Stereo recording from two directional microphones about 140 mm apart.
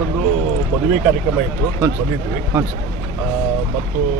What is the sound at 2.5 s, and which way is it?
Speech, 15° right (ahead or behind).